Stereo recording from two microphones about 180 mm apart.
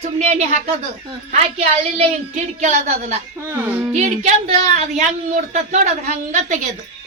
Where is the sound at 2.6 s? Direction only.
40° right (ahead or behind).